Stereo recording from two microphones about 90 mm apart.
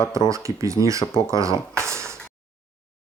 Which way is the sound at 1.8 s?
30° right (ahead or behind).